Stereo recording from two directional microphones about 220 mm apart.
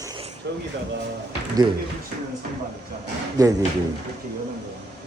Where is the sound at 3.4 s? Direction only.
15° right (ahead or behind).